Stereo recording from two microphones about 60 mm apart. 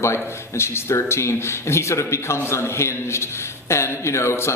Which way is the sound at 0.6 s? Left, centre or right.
Left.